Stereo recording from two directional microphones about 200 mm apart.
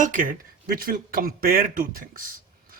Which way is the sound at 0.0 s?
40° right (ahead or behind).